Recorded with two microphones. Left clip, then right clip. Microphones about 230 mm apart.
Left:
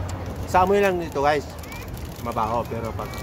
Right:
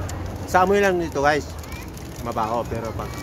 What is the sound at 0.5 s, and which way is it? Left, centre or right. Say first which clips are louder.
Speech: right 1 dB; centre.